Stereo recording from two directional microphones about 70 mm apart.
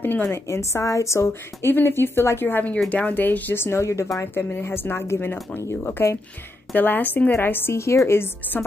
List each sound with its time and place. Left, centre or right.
0.0 s a woman's voice: left
4.2 s a woman's voice: left